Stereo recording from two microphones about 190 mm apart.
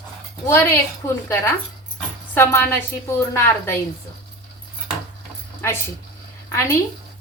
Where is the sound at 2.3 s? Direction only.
10° left (ahead or behind).